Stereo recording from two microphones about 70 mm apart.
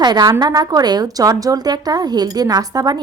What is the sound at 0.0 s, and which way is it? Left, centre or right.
Speech, right.